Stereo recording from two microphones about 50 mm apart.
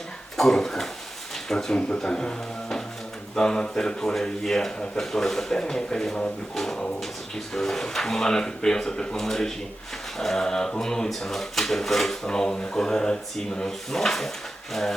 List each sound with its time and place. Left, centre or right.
0.3 s speech: centre